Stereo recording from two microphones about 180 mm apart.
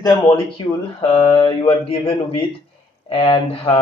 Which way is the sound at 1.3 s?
30° left (ahead or behind).